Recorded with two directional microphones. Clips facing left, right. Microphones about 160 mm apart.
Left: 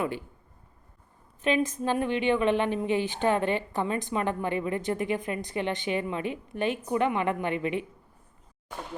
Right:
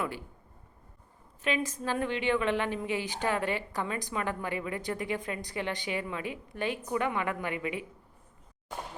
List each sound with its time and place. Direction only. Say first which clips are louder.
1.5 s a woman's voice: left 5 dB; 25° left (ahead or behind)